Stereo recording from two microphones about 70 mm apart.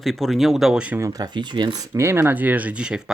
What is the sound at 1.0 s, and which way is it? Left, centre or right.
Speech, right.